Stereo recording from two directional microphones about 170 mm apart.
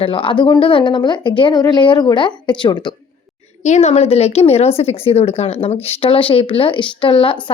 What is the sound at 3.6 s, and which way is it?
A woman's voice, 40° left (ahead or behind).